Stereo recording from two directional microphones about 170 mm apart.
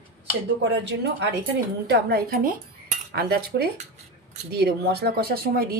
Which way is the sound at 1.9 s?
65° right (ahead or behind).